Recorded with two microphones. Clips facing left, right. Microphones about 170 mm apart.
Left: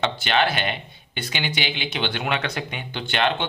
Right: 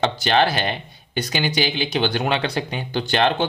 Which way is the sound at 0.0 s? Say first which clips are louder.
Right 3 dB; 40° right (ahead or behind).